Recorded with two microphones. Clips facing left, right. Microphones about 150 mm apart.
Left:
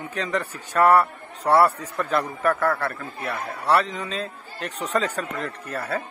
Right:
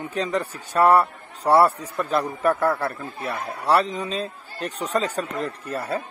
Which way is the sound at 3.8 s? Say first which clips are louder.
Right 2 dB; 20° right (ahead or behind).